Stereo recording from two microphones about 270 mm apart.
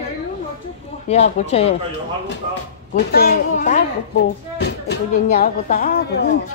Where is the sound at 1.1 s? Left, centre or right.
Left.